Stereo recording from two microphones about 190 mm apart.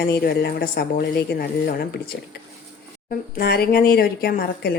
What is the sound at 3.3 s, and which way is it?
A woman's voice, 55° left (ahead or behind).